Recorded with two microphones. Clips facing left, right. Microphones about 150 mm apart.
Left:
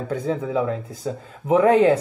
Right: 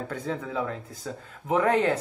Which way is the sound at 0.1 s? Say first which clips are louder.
Left 11 dB; 15° left (ahead or behind).